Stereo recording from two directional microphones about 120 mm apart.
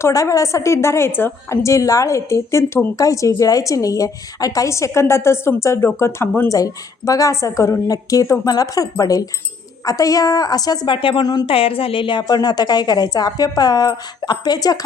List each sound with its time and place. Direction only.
0.0 s a woman's voice: 30° left (ahead or behind)
11.4 s a woman's voice: 50° left (ahead or behind); by 14.8 s 35° left (ahead or behind)